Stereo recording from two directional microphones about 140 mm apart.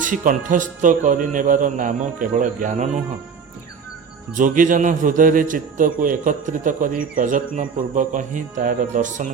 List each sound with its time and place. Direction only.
0.0 s a man's voice: 70° right (ahead or behind)
4.4 s a man's voice: 70° right (ahead or behind)